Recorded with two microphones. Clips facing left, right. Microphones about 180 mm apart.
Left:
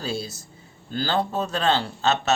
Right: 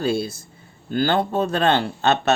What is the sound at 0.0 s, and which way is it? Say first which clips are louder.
Speech: right 7 dB; 55° right (ahead or behind).